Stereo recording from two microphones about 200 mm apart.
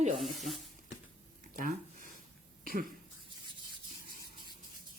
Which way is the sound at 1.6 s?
45° right (ahead or behind).